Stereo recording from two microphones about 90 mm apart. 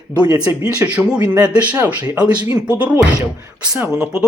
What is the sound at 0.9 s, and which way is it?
A man's voice, 15° right (ahead or behind).